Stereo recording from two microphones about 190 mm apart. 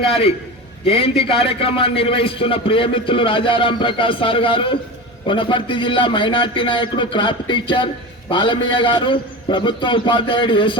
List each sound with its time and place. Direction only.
0.0 s a man's voice: 30° left (ahead or behind)